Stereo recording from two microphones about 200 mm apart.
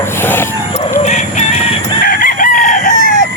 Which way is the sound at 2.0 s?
45° left (ahead or behind).